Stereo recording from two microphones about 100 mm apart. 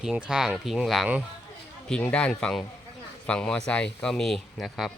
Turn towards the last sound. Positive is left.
turn(degrees=0)  # may be behind; listen again after turning